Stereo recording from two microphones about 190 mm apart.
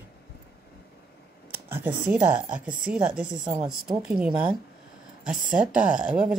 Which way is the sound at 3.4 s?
20° right (ahead or behind).